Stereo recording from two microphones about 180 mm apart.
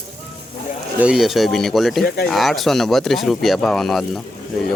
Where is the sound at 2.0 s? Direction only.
60° left (ahead or behind).